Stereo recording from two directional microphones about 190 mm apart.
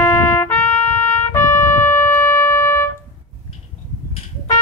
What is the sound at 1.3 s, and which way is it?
Music, 15° left (ahead or behind).